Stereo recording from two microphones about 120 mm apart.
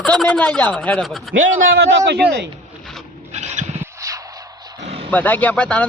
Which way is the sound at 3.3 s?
70° right (ahead or behind).